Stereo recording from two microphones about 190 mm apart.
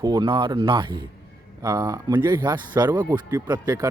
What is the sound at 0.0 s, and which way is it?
A man's voice, 20° right (ahead or behind).